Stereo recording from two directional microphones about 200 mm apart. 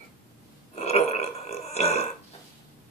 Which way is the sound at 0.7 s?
30° left (ahead or behind).